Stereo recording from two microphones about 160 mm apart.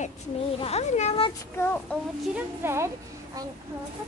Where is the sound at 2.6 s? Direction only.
15° right (ahead or behind).